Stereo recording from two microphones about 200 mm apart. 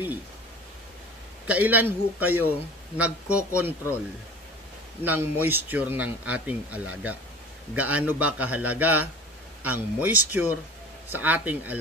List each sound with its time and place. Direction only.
1.5 s a man's voice: 10° right (ahead or behind)
5.0 s a man's voice: 10° right (ahead or behind)